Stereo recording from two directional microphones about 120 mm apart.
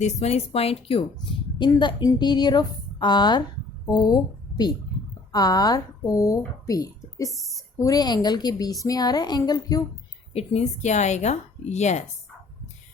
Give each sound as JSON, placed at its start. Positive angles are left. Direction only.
{"t": 0.0, "sound": "a woman's voice", "side_deg": 65}
{"t": 1.5, "sound": "a woman's voice", "side_deg": 40}
{"t": 10.3, "sound": "a woman's voice", "side_deg": 60}